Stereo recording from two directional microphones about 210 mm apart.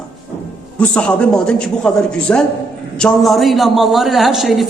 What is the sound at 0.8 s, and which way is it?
A man's voice, 5° left (ahead or behind).